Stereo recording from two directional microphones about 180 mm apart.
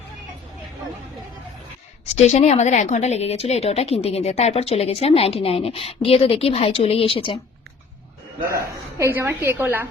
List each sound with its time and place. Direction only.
2.1 s a woman's voice: 40° left (ahead or behind)
9.0 s a woman's voice: 15° right (ahead or behind)